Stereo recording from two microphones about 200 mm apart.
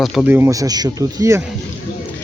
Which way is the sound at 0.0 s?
Centre (ahead or behind).